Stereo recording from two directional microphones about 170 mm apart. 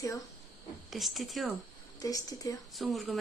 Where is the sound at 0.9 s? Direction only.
Centre (ahead or behind).